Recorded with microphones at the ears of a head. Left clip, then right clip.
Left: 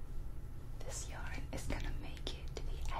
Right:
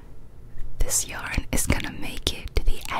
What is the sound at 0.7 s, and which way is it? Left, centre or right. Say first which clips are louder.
Speech: right 19 dB; right.